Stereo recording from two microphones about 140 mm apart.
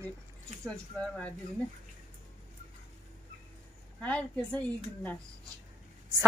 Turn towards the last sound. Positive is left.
turn(degrees=10)  # may be behind; listen again after turning